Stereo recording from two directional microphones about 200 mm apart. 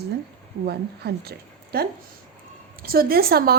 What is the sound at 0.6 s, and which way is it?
A woman's voice, 50° right (ahead or behind).